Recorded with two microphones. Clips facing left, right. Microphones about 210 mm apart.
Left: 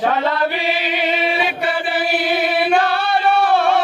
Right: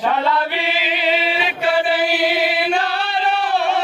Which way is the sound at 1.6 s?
55° left (ahead or behind).